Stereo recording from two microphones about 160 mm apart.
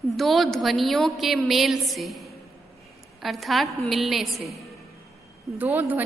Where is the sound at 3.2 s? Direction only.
Centre (ahead or behind).